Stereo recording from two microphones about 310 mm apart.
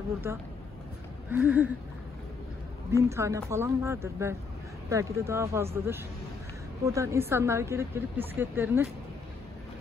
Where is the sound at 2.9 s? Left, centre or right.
Centre.